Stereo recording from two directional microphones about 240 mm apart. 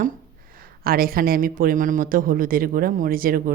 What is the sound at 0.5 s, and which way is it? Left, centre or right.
Speech, right.